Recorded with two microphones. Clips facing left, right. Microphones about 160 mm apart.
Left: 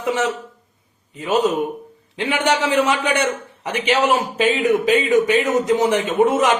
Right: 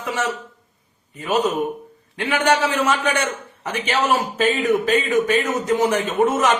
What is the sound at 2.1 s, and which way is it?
A man's voice, 20° left (ahead or behind).